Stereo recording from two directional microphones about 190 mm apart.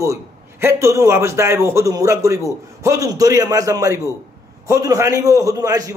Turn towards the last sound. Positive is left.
turn(degrees=-15)  # may be behind; listen again after turning